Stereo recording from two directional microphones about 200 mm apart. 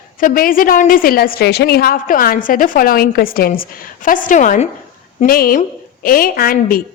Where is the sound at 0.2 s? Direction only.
45° left (ahead or behind).